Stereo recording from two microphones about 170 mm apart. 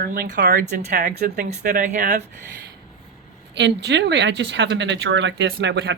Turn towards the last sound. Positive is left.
turn(degrees=-90)